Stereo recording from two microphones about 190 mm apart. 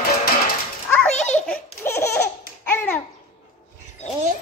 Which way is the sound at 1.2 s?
40° left (ahead or behind).